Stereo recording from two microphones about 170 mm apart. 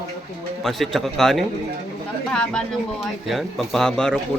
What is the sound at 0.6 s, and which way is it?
Speech, centre (ahead or behind).